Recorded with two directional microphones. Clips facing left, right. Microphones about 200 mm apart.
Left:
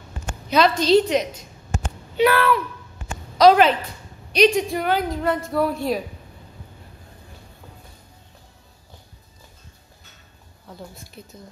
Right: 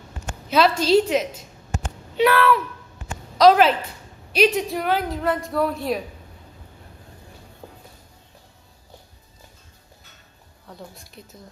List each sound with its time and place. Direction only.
0.5 s a woman's voice: 5° right (ahead or behind)
7.6 s music: 30° right (ahead or behind)
10.7 s a woman's voice: centre (ahead or behind)